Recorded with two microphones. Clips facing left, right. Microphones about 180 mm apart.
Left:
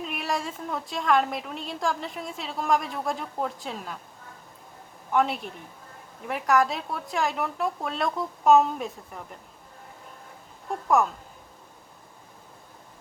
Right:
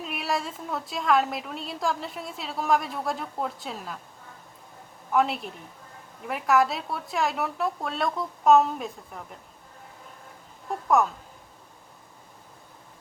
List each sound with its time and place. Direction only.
0.0 s a woman's voice: centre (ahead or behind)
5.1 s a woman's voice: centre (ahead or behind)
10.8 s speech: centre (ahead or behind)